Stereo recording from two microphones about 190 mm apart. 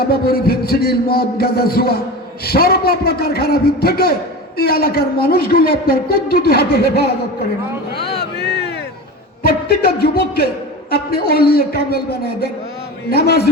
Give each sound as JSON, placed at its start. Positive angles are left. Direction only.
{"t": 0.0, "sound": "a man's voice", "side_deg": 55}
{"t": 8.0, "sound": "a sound", "side_deg": 60}
{"t": 9.4, "sound": "music", "side_deg": 55}
{"t": 10.9, "sound": "a woman's voice", "side_deg": 55}
{"t": 13.1, "sound": "a man's voice", "side_deg": 55}